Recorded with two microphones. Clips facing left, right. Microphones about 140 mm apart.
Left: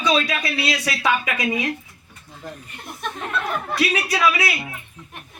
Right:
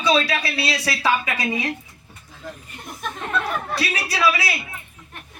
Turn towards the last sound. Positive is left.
turn(degrees=-30)  # may be behind; listen again after turning